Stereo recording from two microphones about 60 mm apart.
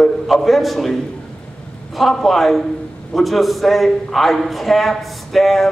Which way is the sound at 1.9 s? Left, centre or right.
Centre.